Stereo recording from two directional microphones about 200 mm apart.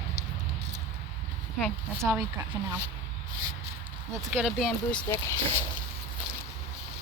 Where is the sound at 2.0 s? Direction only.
15° right (ahead or behind).